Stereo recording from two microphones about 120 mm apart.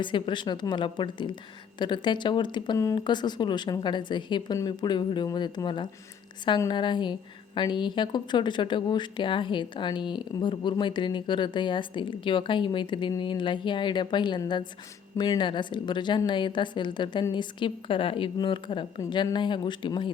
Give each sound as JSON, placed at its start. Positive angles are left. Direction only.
{"t": 0.0, "sound": "a woman's voice", "side_deg": 40}